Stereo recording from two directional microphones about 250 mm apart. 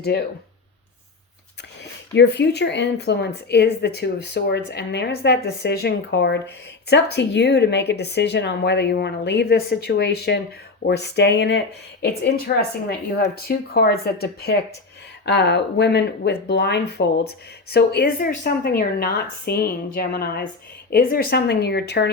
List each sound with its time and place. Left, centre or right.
0.0 s a woman's voice: left
2.1 s a woman's voice: left
13.1 s a woman's voice: left